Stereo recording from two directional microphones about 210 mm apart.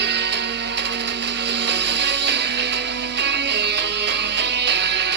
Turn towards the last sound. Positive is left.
turn(degrees=-55)  # may be behind; listen again after turning